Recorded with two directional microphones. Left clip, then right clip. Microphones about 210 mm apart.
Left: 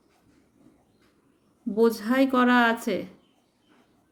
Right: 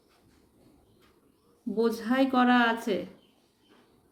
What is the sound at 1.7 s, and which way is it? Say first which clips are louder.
Speech: left 5 dB; 35° left (ahead or behind).